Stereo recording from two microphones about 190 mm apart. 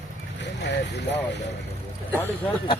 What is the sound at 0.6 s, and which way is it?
Speech, 65° left (ahead or behind).